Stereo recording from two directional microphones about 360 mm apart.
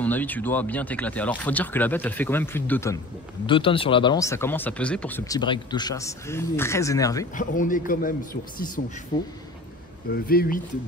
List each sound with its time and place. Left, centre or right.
0.0 s speech: centre
7.3 s a man's voice: left
9.1 s speech: centre
10.1 s a man's voice: left